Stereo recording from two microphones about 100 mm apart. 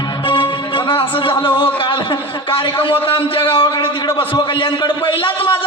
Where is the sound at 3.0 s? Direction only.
60° left (ahead or behind).